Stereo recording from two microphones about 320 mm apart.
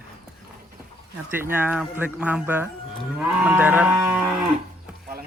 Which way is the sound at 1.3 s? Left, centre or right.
Centre.